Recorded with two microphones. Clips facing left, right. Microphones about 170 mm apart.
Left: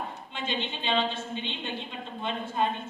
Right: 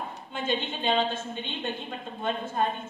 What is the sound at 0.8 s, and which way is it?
A woman's voice, 45° right (ahead or behind).